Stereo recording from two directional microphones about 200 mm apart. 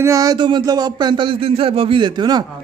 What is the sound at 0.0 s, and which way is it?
Speech, 15° right (ahead or behind).